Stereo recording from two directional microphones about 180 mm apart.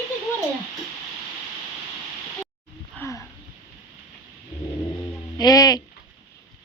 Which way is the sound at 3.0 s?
15° left (ahead or behind).